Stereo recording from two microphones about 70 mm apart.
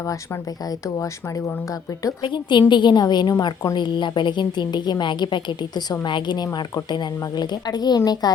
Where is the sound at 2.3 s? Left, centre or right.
Left.